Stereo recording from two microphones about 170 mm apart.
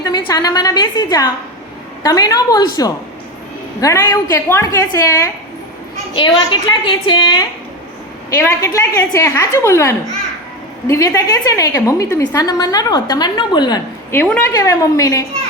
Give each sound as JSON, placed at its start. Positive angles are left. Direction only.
{"t": 0.0, "sound": "a woman's voice", "side_deg": 25}
{"t": 6.1, "sound": "a woman's voice", "side_deg": 30}
{"t": 8.4, "sound": "a woman's voice", "side_deg": 20}
{"t": 14.3, "sound": "a woman's voice", "side_deg": 10}